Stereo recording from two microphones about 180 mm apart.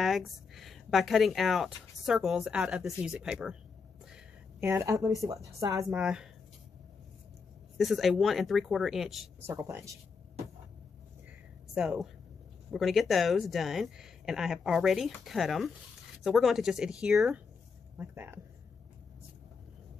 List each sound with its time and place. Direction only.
0.0 s a woman's voice: centre (ahead or behind); by 5.9 s 20° right (ahead or behind)
5.9 s speech: 5° right (ahead or behind)
7.7 s speech: centre (ahead or behind)
9.4 s speech: 15° right (ahead or behind)
11.7 s speech: 5° right (ahead or behind)